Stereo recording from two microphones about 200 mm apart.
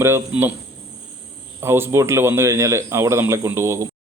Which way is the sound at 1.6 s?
10° right (ahead or behind).